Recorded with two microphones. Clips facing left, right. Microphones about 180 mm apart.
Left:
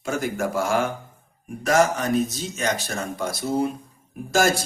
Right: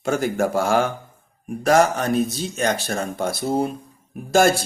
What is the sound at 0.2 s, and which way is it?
Mantra, 30° right (ahead or behind).